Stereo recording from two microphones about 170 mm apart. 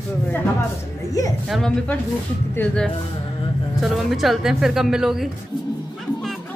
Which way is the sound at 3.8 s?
Centre (ahead or behind).